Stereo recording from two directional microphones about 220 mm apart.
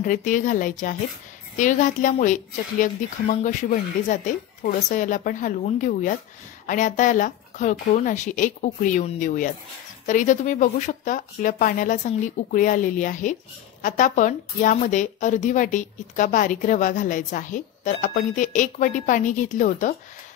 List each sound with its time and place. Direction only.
0.0 s a woman's voice: 35° left (ahead or behind)
4.6 s a woman's voice: 35° left (ahead or behind)